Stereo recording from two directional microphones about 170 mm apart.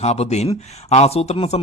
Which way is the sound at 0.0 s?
40° left (ahead or behind).